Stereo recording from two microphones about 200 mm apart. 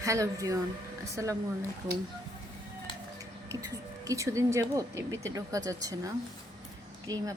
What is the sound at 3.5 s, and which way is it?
Speech, 15° right (ahead or behind).